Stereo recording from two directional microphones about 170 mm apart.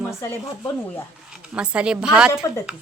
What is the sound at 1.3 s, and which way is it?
A woman's voice, 5° right (ahead or behind).